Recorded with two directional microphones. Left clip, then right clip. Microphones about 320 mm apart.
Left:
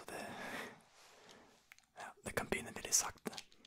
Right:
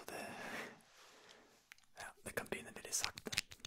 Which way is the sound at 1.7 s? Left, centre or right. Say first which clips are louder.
Left 1 dB; centre.